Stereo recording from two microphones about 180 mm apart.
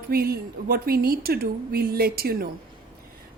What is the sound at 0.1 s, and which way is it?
A woman's voice, 55° right (ahead or behind).